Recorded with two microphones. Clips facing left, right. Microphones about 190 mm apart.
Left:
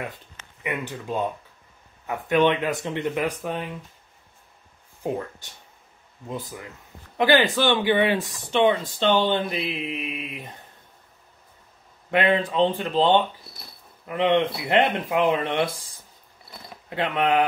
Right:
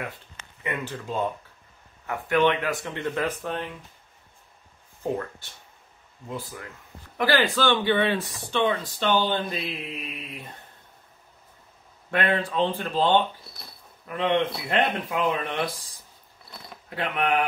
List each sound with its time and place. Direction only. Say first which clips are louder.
0.7 s speech: left 2 dB; 15° left (ahead or behind)
6.2 s speech: left 2 dB; 20° left (ahead or behind)
12.1 s speech: left 4 dB; 20° left (ahead or behind)
16.9 s speech: left 3 dB; 25° left (ahead or behind)